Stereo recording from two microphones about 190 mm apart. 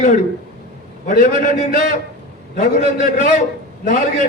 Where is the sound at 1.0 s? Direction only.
45° left (ahead or behind).